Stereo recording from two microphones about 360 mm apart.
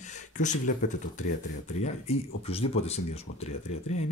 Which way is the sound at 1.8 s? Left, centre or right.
Centre.